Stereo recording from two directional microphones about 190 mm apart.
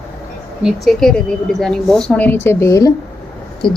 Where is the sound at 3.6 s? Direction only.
25° left (ahead or behind).